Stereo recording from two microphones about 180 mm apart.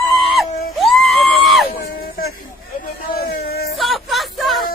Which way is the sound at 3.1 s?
60° left (ahead or behind).